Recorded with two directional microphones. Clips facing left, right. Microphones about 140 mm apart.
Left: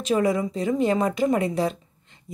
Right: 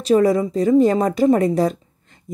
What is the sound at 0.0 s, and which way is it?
A woman's voice, 35° right (ahead or behind).